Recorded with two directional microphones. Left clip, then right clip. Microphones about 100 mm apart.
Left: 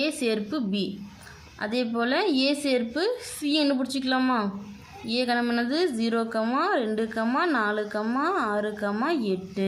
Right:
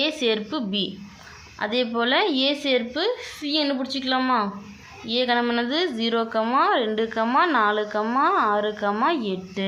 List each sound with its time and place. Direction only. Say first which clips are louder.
0.0 s a woman's voice: right 4 dB; 35° left (ahead or behind)